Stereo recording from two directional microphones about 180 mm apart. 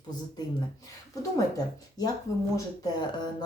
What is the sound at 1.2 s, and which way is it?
Speech, 20° left (ahead or behind).